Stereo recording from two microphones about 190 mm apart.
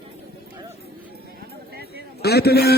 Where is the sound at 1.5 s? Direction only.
55° right (ahead or behind).